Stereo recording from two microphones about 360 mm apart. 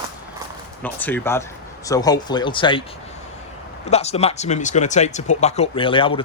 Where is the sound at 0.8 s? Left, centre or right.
Centre.